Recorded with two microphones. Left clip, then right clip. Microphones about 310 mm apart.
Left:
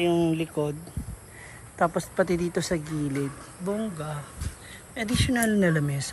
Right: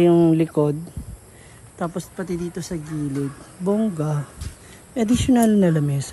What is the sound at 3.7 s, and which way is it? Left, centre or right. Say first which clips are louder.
Speech: right 8 dB; right.